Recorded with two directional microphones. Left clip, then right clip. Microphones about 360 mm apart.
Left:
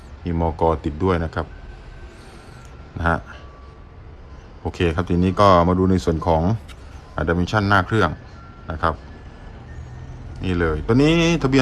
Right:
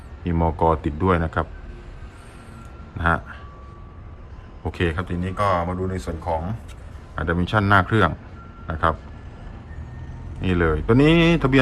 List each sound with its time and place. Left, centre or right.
0.3 s speech: centre
4.6 s speech: centre
7.2 s speech: centre
10.4 s speech: centre